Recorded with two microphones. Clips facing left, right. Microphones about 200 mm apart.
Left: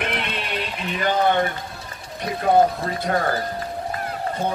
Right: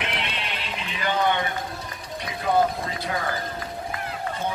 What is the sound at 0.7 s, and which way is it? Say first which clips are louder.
Speech: left 4 dB; 50° left (ahead or behind).